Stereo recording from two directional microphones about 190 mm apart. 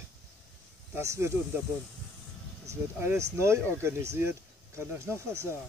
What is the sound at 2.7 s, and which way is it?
Speech, 15° right (ahead or behind).